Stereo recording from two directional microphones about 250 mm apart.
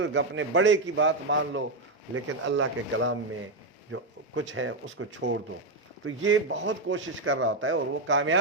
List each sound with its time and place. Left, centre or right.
0.0 s speech: right